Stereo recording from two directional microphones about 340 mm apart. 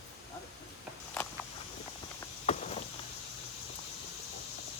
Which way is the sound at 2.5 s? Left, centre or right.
Centre.